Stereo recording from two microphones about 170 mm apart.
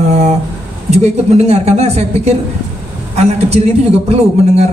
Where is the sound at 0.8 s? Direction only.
40° right (ahead or behind).